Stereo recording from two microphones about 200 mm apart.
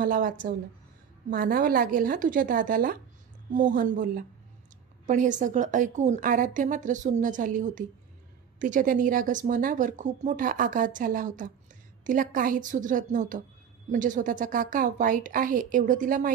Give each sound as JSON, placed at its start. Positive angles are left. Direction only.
{"t": 0.0, "sound": "a woman's voice", "side_deg": -45}